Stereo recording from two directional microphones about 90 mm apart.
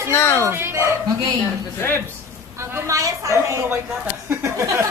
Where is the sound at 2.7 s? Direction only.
35° right (ahead or behind).